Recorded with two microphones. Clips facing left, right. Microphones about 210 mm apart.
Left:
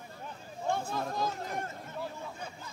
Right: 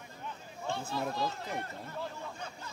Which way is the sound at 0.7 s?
45° left (ahead or behind).